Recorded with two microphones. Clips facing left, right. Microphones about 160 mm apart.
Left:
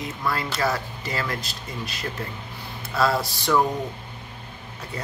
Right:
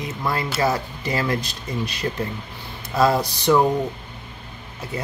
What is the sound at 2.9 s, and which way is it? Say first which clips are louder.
Speech: right 4 dB; 15° right (ahead or behind).